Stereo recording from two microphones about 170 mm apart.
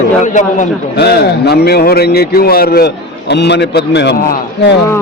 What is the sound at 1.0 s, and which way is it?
A man's voice, 70° left (ahead or behind).